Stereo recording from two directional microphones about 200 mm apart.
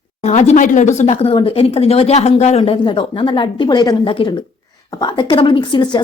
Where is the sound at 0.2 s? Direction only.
35° left (ahead or behind).